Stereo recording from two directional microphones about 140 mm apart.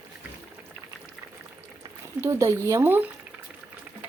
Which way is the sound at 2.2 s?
20° right (ahead or behind).